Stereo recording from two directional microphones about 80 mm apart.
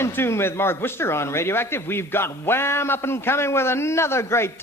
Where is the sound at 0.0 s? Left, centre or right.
Left.